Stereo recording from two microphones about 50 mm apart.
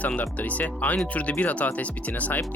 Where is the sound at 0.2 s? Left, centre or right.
Left.